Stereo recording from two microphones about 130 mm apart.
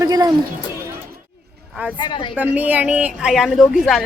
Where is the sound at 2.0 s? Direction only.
35° left (ahead or behind).